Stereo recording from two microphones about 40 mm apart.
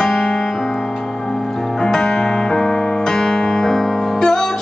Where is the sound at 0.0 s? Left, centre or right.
Centre.